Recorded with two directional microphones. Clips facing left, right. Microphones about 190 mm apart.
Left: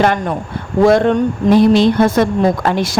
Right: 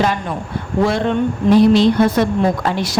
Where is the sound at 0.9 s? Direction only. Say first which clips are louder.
Left 8 dB; 45° left (ahead or behind).